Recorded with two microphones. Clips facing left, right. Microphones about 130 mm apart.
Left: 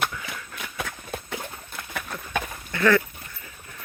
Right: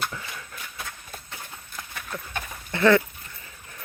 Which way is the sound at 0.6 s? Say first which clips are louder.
Left 5 dB; 90° left.